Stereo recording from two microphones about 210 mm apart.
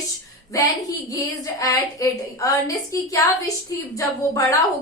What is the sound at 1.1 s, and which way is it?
A woman's voice, 15° left (ahead or behind).